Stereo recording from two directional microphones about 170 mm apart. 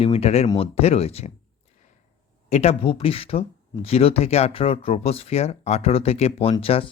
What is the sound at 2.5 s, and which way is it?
Speech, 40° left (ahead or behind).